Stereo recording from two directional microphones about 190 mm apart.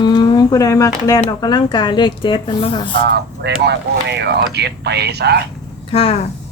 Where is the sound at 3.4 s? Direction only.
60° right (ahead or behind).